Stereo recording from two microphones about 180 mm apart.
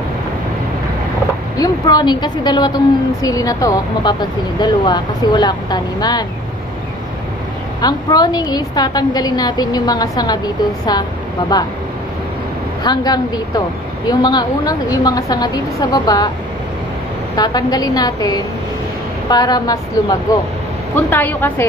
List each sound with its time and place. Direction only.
1.6 s a woman's voice: 20° left (ahead or behind)
7.8 s a woman's voice: 20° left (ahead or behind)
12.8 s a woman's voice: 25° left (ahead or behind)
17.4 s a woman's voice: 20° left (ahead or behind)